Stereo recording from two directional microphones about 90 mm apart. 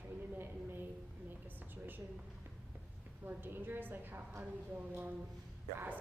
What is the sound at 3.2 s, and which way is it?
A woman's voice, 25° right (ahead or behind).